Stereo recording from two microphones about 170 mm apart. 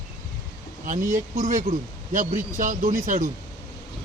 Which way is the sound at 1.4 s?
45° right (ahead or behind).